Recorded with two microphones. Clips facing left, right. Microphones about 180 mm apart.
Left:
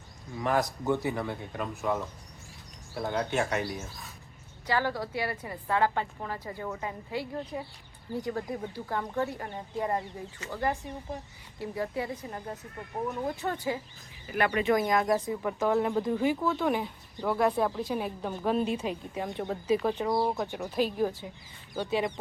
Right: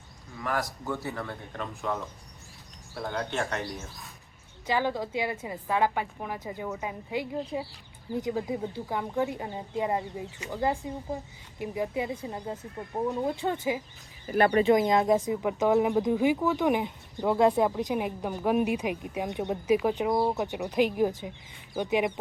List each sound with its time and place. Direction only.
0.3 s speech: 20° left (ahead or behind)
4.6 s speech: 20° right (ahead or behind)
13.3 s speech: 30° right (ahead or behind)
14.7 s speech: 20° right (ahead or behind)